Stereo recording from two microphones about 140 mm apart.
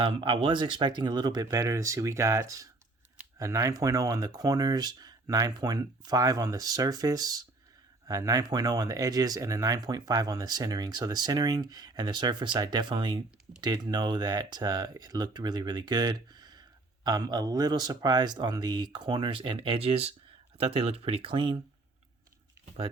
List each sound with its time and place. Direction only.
0.0 s speech: 35° right (ahead or behind)